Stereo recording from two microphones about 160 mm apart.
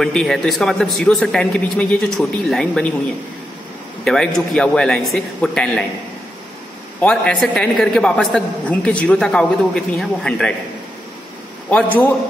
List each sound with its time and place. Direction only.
0.0 s a man's voice: centre (ahead or behind)
4.0 s a man's voice: centre (ahead or behind)
7.0 s a man's voice: 5° left (ahead or behind)